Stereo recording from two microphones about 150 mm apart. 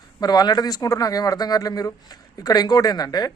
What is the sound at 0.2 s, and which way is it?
Speech, 25° left (ahead or behind).